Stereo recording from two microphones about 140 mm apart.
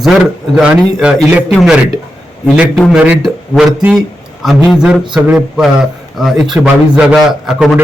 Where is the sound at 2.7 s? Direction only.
Centre (ahead or behind).